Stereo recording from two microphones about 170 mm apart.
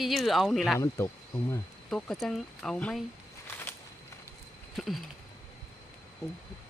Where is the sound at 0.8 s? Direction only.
15° left (ahead or behind).